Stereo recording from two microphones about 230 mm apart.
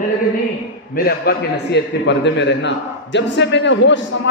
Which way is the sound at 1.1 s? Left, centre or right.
Left.